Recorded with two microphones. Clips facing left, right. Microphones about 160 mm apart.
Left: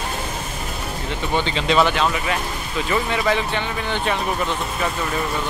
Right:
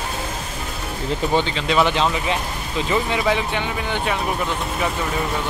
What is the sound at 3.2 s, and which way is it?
Speech, 10° right (ahead or behind).